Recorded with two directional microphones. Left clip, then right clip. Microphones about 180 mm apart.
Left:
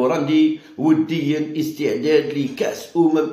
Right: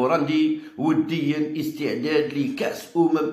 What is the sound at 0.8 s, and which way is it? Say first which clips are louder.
A man's voice: left 5 dB; centre (ahead or behind).